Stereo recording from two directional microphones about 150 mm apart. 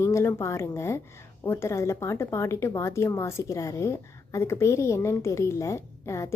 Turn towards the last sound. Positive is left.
turn(degrees=20)  # may be behind; listen again after turning